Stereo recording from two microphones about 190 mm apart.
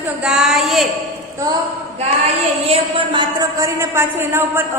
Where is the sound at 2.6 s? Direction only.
25° right (ahead or behind).